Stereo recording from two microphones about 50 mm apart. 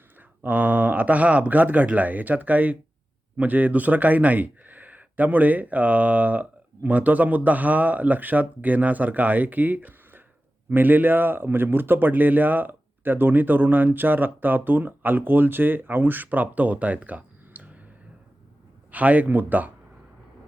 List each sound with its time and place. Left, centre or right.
0.2 s speech: right
18.9 s speech: right